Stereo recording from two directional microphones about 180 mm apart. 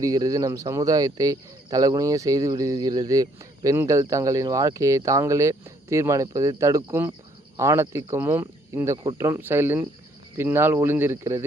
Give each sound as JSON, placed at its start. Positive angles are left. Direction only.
{"t": 0.0, "sound": "speech", "side_deg": -20}